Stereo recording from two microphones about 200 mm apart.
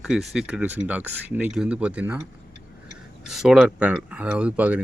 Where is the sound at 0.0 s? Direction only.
Centre (ahead or behind).